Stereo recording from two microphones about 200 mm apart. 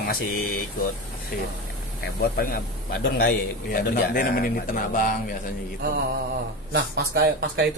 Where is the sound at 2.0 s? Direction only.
50° left (ahead or behind).